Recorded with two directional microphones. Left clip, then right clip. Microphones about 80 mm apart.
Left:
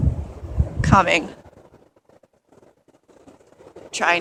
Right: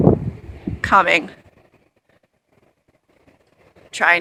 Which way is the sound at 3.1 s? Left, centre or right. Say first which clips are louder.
Left 7 dB; left.